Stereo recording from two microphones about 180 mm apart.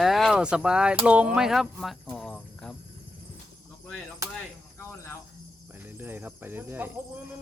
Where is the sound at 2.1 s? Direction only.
5° left (ahead or behind).